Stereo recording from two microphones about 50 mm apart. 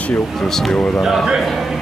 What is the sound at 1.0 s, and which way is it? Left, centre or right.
Speech, centre.